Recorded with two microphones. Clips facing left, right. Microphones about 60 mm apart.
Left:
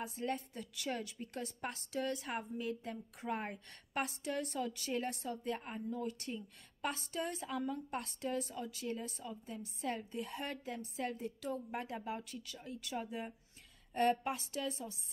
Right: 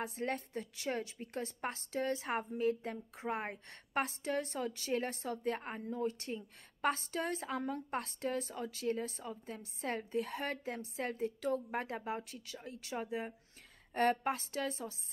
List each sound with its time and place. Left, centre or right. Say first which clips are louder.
0.0 s a woman's voice: right 1 dB; right
13.9 s a woman's voice: right 1 dB; right